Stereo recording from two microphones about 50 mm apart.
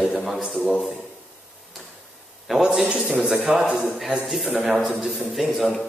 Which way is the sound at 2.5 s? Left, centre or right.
Centre.